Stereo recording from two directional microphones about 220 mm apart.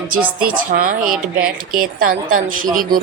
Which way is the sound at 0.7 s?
40° right (ahead or behind).